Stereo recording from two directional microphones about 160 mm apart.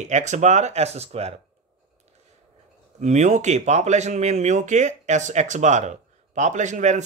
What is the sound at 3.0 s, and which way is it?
Speech, 45° right (ahead or behind).